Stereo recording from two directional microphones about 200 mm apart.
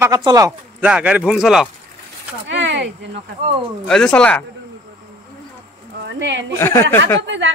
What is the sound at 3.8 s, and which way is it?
Speech, 5° left (ahead or behind).